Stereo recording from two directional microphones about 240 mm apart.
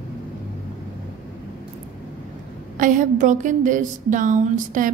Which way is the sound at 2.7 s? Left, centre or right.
Right.